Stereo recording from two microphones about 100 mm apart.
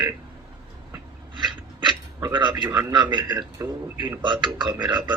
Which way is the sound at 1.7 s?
45° right (ahead or behind).